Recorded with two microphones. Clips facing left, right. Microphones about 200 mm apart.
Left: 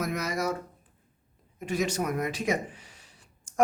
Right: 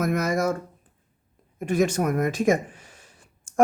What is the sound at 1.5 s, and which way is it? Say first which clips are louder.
Speech: right 6 dB; 50° right (ahead or behind).